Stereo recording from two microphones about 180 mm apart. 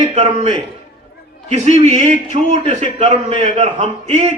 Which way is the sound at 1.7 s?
35° right (ahead or behind).